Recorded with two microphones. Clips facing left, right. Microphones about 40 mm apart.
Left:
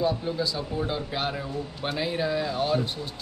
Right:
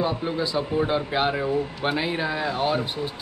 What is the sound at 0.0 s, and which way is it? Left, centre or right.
Speech, right.